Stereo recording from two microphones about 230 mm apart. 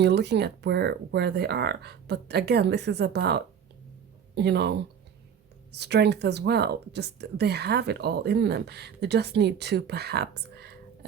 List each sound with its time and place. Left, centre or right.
0.0 s speech: right